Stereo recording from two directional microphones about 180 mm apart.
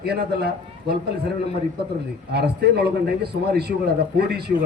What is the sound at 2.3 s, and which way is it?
A man's voice, 65° right (ahead or behind).